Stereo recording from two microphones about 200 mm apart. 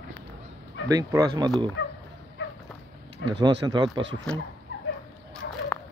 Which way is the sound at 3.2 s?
70° left (ahead or behind).